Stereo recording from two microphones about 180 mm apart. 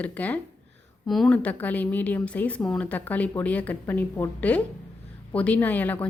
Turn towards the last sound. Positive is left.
turn(degrees=10)  # may be behind; listen again after turning